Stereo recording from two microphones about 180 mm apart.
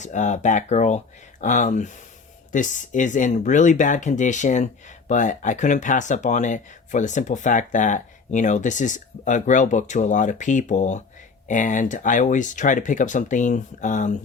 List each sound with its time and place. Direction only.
0.0 s speech: 40° left (ahead or behind)